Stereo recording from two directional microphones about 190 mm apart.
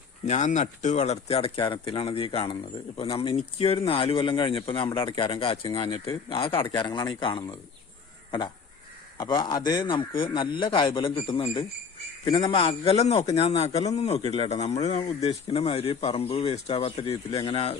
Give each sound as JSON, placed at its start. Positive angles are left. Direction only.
{"t": 0.3, "sound": "speech", "side_deg": 40}
{"t": 9.1, "sound": "speech", "side_deg": 20}